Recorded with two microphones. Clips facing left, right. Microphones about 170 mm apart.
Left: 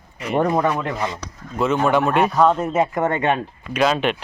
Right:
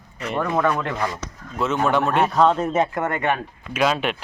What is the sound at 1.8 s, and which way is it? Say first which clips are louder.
Speech: left 1 dB; 5° left (ahead or behind).